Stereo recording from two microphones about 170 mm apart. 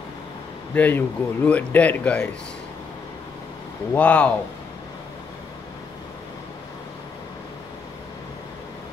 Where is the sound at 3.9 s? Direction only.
5° left (ahead or behind).